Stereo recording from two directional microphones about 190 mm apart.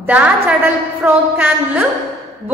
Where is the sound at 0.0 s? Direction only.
10° right (ahead or behind).